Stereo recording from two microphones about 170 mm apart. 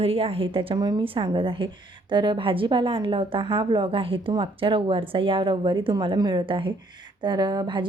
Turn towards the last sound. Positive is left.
turn(degrees=-25)  # may be behind; listen again after turning